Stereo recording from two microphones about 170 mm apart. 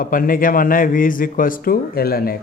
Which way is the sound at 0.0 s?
55° left (ahead or behind).